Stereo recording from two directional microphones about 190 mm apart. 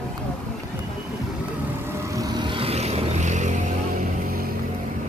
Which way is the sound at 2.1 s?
20° right (ahead or behind).